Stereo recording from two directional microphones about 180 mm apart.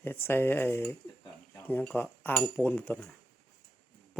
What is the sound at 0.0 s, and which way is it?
Speech, 10° left (ahead or behind).